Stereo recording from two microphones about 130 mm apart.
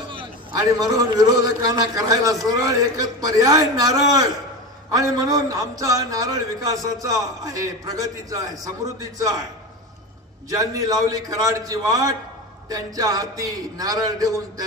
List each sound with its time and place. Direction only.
0.1 s a man's voice: 40° right (ahead or behind)
10.5 s a man's voice: 25° right (ahead or behind)